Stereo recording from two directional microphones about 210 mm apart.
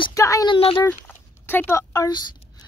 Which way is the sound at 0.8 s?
10° left (ahead or behind).